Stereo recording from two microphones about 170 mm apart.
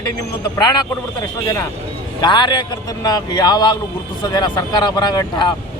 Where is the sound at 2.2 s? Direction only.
25° left (ahead or behind).